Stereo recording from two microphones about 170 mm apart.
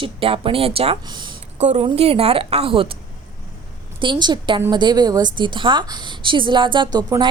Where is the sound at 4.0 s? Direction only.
25° right (ahead or behind).